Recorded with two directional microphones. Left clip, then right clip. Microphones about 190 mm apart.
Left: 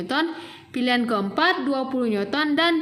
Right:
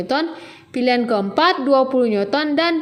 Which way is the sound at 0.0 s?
15° right (ahead or behind).